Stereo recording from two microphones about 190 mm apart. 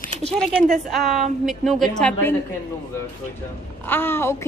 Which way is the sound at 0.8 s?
Centre (ahead or behind).